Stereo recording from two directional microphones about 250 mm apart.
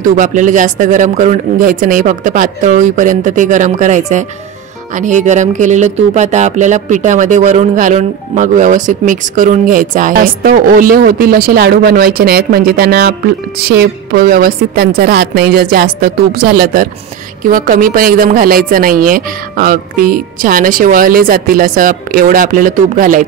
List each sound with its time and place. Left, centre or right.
0.0 s speech: right